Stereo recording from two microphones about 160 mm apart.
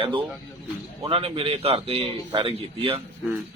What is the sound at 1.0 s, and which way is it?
A man's voice, 35° right (ahead or behind).